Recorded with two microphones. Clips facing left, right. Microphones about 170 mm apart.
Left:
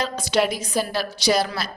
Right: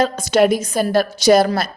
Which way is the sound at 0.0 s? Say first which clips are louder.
Right 7 dB; 45° right (ahead or behind).